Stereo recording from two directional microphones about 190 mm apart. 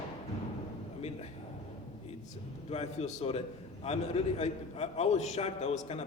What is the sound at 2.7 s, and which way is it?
A man's voice, 35° left (ahead or behind).